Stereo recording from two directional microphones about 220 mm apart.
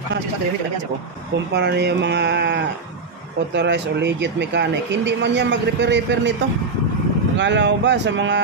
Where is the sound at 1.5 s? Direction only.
50° right (ahead or behind).